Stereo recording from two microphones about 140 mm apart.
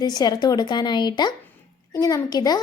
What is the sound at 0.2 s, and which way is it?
A woman's voice, 30° left (ahead or behind).